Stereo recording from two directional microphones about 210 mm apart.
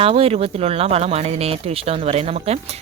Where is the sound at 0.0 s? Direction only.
25° right (ahead or behind).